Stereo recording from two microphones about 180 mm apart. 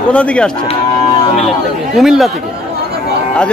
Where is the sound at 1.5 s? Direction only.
Centre (ahead or behind).